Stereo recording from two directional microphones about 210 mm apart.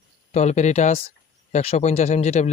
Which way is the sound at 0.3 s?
35° left (ahead or behind).